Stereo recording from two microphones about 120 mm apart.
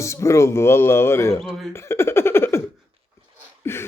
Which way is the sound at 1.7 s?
20° left (ahead or behind).